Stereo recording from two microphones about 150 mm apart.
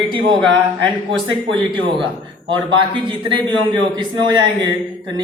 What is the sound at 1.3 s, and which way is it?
A man's voice, 35° right (ahead or behind).